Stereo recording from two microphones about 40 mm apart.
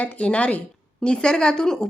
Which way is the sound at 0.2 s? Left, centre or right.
Left.